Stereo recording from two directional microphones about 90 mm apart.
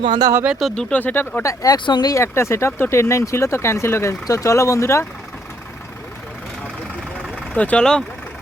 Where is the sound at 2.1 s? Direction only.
30° left (ahead or behind).